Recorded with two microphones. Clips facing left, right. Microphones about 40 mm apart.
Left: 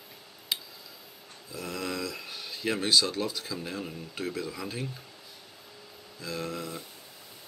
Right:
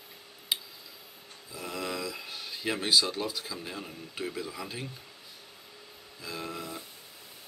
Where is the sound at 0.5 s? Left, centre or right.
Centre.